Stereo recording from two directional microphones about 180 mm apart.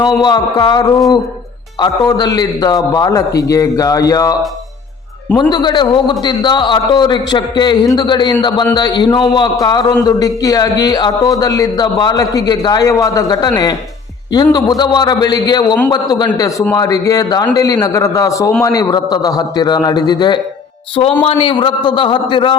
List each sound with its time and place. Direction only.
0.2 s a man's voice: 20° left (ahead or behind)
5.4 s a man's voice: 25° left (ahead or behind)